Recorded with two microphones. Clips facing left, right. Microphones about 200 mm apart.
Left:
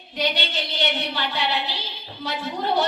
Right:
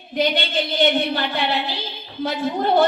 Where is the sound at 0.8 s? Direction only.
50° right (ahead or behind).